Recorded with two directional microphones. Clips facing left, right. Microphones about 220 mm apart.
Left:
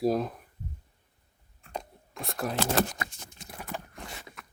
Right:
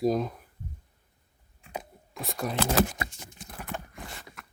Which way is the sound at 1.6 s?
5° right (ahead or behind).